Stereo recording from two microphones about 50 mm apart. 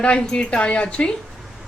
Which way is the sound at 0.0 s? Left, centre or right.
Left.